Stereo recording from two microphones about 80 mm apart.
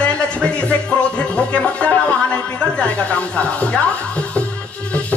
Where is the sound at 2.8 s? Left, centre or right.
Centre.